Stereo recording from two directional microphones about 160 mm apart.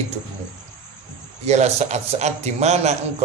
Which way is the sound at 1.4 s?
45° right (ahead or behind).